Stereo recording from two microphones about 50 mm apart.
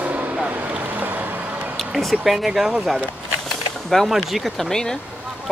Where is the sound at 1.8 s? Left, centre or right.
Centre.